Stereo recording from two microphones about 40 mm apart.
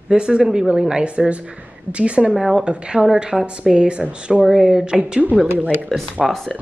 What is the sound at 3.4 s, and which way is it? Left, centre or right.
A woman's voice, right.